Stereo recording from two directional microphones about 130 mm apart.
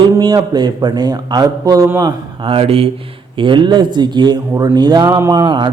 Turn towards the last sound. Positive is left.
turn(degrees=-35)  # may be behind; listen again after turning